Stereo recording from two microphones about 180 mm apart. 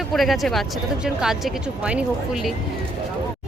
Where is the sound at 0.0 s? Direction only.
Centre (ahead or behind).